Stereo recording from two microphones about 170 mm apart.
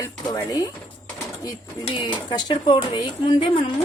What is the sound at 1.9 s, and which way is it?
A woman's voice, 30° left (ahead or behind).